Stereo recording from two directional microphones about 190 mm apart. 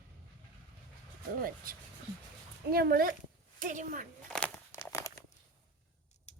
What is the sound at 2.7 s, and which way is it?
Speech, 50° right (ahead or behind).